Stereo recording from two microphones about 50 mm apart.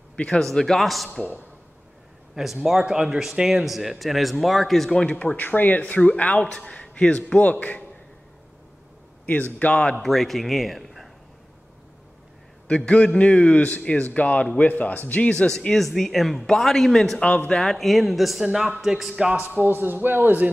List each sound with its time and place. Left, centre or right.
0.3 s speech: centre
2.3 s a man's voice: centre
5.2 s speech: left
9.2 s speech: left
9.8 s speech: centre
12.6 s speech: left
15.3 s speech: centre
19.3 s a man's voice: right